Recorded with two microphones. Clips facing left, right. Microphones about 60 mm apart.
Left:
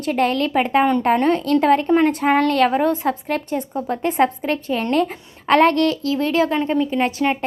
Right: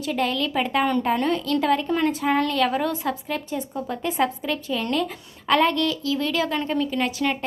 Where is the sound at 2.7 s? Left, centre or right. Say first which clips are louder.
Left 6 dB; left.